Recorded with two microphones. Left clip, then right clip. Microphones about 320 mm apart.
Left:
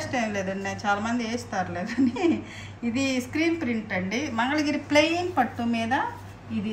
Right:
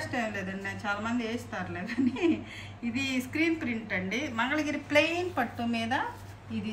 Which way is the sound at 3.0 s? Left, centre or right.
Centre.